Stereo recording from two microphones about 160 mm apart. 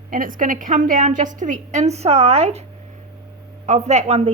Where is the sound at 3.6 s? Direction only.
45° right (ahead or behind).